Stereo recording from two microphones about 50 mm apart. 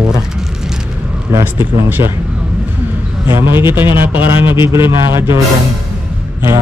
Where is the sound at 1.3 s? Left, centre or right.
Right.